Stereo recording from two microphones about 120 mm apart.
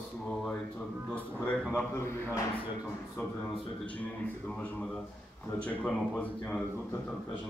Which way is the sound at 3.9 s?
10° left (ahead or behind).